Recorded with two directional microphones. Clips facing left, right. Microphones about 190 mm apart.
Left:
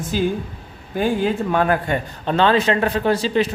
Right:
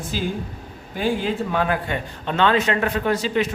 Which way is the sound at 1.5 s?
45° left (ahead or behind).